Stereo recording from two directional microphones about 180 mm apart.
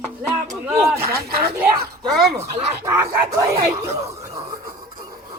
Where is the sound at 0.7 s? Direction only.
15° right (ahead or behind).